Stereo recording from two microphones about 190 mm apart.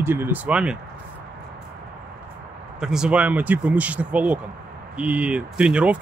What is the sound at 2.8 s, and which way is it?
Speech, 5° right (ahead or behind).